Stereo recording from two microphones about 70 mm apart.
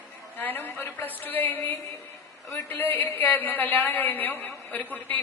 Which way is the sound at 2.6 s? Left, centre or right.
Left.